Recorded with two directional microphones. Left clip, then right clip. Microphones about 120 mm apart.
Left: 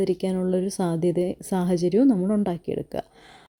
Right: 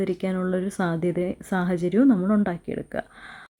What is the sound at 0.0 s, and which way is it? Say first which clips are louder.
A woman's voice: left 2 dB; 40° left (ahead or behind).